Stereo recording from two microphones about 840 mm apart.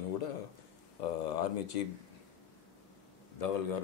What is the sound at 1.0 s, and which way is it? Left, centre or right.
Speech, left.